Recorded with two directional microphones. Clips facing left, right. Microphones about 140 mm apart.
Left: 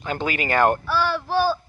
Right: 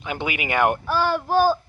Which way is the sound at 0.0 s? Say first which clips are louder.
Left 2 dB; 15° right (ahead or behind).